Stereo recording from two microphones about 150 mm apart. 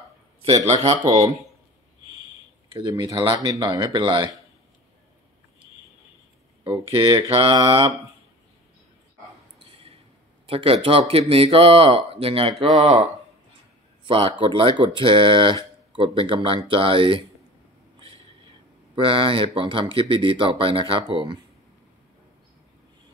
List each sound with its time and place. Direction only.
0.7 s speech: 45° right (ahead or behind)
2.7 s speech: 30° right (ahead or behind)
6.6 s speech: 35° right (ahead or behind)
9.6 s a sound: 40° right (ahead or behind)
10.4 s speech: 40° right (ahead or behind)
14.0 s speech: 35° right (ahead or behind)
17.9 s a sound: 35° right (ahead or behind)
18.9 s speech: 35° right (ahead or behind)